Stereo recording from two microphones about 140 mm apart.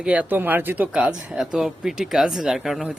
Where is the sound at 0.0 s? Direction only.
10° right (ahead or behind).